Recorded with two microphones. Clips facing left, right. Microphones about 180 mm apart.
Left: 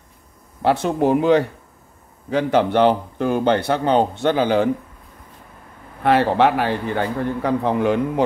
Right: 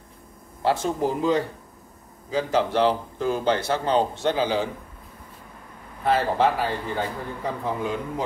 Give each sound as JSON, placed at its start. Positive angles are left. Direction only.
{"t": 0.6, "sound": "a man's voice", "side_deg": 65}
{"t": 6.0, "sound": "a man's voice", "side_deg": 70}